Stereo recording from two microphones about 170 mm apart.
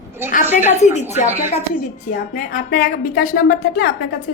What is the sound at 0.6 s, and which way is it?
Speech, 40° left (ahead or behind).